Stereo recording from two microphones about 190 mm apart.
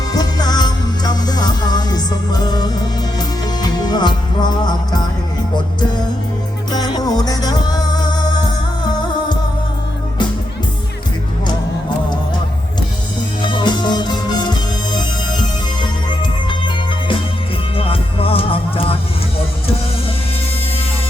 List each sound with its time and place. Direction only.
0.1 s music: 20° left (ahead or behind)
6.7 s music: 20° left (ahead or behind)
13.4 s music: 25° left (ahead or behind)